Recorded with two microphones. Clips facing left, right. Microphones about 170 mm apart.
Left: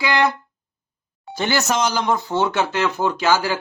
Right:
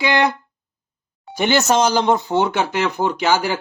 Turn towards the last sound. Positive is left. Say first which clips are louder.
# right 1 dB
turn(degrees=-20)  # may be behind; listen again after turning